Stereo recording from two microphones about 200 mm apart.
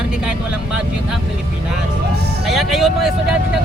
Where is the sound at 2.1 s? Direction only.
55° right (ahead or behind).